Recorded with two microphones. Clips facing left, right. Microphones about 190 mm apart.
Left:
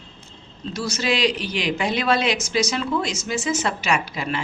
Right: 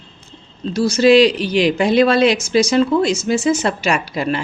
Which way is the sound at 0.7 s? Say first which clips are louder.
Right 13 dB; 30° right (ahead or behind).